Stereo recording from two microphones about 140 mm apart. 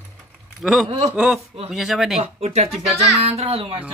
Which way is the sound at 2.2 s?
50° right (ahead or behind).